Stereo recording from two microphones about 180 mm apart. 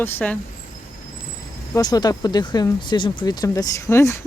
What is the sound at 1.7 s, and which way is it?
Speech, 20° left (ahead or behind).